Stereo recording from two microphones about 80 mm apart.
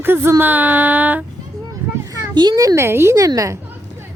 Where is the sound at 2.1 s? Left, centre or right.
Right.